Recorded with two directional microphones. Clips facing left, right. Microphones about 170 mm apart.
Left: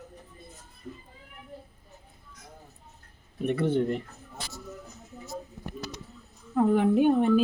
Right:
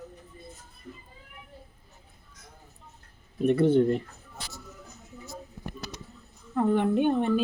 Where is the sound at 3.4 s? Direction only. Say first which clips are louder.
Right 5 dB; 35° right (ahead or behind).